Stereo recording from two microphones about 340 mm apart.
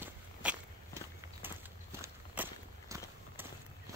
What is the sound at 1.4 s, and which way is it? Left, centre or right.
Walk, centre.